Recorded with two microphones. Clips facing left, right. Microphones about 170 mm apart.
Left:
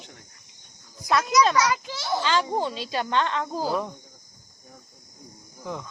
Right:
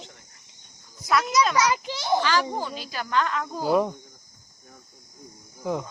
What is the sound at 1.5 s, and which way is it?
Speech, 20° right (ahead or behind).